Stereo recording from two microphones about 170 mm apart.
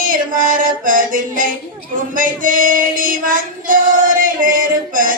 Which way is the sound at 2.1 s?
50° right (ahead or behind).